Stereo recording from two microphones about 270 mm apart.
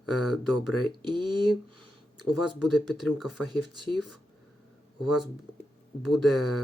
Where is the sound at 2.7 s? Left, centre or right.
Centre.